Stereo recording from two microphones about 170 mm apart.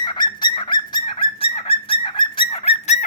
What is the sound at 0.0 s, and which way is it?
Bird, 25° left (ahead or behind).